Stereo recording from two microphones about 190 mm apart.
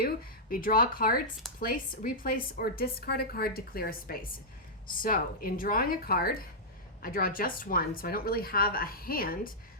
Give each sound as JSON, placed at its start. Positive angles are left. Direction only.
{"t": 0.5, "sound": "a woman's voice", "side_deg": 50}